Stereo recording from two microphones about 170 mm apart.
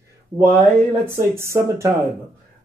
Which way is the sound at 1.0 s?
15° right (ahead or behind).